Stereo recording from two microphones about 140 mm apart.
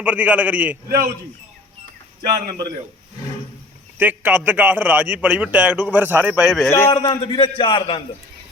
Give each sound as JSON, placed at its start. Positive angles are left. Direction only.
{"t": 0.0, "sound": "a man's voice", "side_deg": -10}
{"t": 0.9, "sound": "speech", "side_deg": -90}
{"t": 3.9, "sound": "a man's voice", "side_deg": -15}
{"t": 6.7, "sound": "a man's voice", "side_deg": 15}
{"t": 7.0, "sound": "a man's voice", "side_deg": 40}